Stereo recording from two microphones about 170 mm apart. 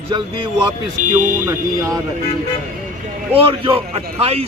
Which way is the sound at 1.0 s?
50° right (ahead or behind).